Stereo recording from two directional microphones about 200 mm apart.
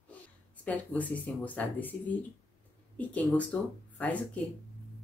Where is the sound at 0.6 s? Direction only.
10° left (ahead or behind).